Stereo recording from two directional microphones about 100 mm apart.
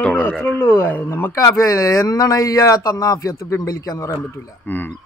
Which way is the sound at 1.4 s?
35° left (ahead or behind).